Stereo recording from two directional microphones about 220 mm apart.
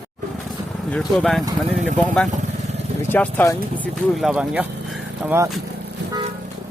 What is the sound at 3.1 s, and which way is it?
Speech, 10° left (ahead or behind).